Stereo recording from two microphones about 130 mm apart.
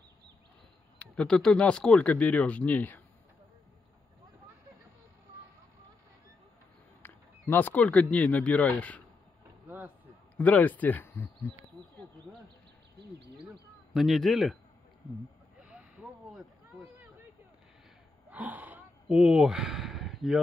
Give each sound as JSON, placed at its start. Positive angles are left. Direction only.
{"t": 0.9, "sound": "speech", "side_deg": 5}
{"t": 7.0, "sound": "speech", "side_deg": 15}
{"t": 9.7, "sound": "a sound", "side_deg": -15}
{"t": 10.3, "sound": "speech", "side_deg": 10}
{"t": 11.8, "sound": "a sound", "side_deg": -35}
{"t": 13.9, "sound": "speech", "side_deg": 0}
{"t": 18.3, "sound": "gasp", "side_deg": -15}
{"t": 19.1, "sound": "speech", "side_deg": -5}